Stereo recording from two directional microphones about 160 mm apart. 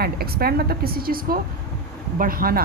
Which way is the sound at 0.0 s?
70° right (ahead or behind).